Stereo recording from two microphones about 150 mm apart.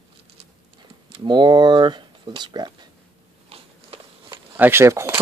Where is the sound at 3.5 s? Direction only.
40° right (ahead or behind).